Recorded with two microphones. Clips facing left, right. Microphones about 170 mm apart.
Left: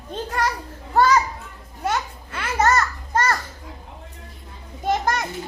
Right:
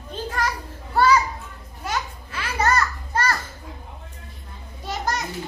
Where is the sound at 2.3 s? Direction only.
25° left (ahead or behind).